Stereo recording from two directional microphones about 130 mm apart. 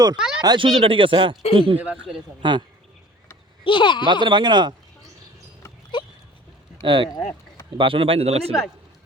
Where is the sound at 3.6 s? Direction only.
40° left (ahead or behind).